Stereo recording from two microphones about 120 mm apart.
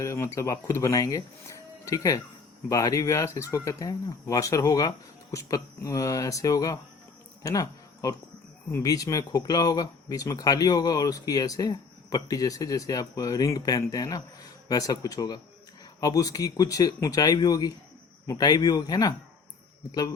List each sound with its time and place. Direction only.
0.0 s speech: 25° left (ahead or behind)
7.4 s a sound: 30° left (ahead or behind)
8.7 s speech: 30° left (ahead or behind)